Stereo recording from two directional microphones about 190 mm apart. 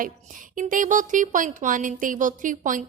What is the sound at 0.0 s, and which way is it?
A woman's voice, 45° right (ahead or behind).